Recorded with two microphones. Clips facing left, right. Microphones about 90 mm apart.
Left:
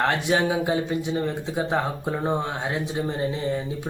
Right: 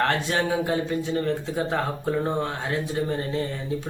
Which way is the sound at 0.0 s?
15° left (ahead or behind).